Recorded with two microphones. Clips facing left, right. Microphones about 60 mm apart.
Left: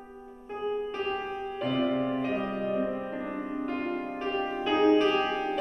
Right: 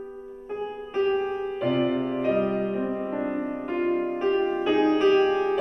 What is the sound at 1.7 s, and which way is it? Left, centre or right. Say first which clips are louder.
Music: right 2 dB; centre.